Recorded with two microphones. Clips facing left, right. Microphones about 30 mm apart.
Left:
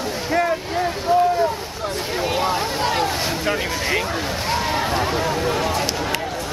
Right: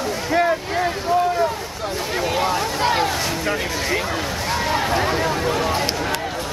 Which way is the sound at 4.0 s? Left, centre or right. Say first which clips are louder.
Even; centre.